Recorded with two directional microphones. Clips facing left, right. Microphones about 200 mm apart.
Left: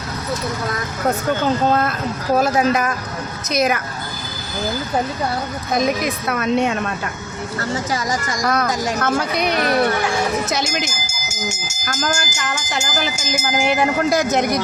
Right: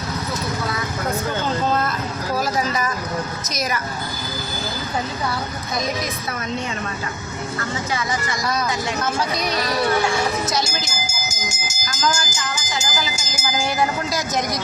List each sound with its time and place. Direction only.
1.8 s a sound: 60° left (ahead or behind)
3.5 s speech: 60° left (ahead or behind)
6.2 s speech: 70° left (ahead or behind)
7.6 s speech: 40° left (ahead or behind)
8.4 s speech: 60° left (ahead or behind)
11.9 s speech: 60° left (ahead or behind)